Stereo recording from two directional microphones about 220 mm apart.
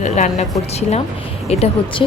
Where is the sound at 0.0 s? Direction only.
30° left (ahead or behind).